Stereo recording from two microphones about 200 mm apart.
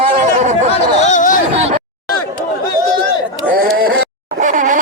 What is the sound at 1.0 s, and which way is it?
Chatter, 35° left (ahead or behind).